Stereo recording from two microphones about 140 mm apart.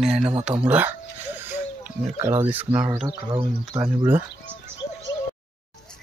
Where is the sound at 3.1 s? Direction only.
30° right (ahead or behind).